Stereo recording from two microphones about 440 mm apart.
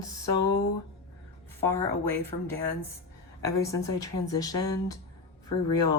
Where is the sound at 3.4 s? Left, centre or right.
Centre.